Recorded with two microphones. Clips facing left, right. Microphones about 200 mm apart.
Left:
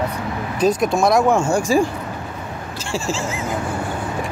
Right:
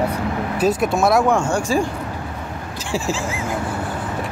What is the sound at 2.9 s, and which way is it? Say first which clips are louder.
Speech: right 1 dB; 15° right (ahead or behind).